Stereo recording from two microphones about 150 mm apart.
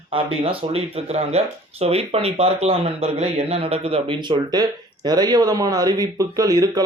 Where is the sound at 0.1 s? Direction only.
40° right (ahead or behind).